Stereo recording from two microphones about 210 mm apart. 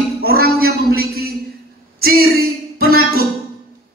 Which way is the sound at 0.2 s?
45° right (ahead or behind).